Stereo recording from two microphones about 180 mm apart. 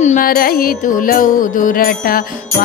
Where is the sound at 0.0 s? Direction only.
50° left (ahead or behind).